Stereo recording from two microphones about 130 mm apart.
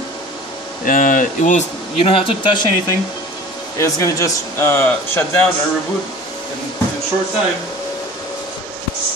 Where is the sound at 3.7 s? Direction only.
25° left (ahead or behind).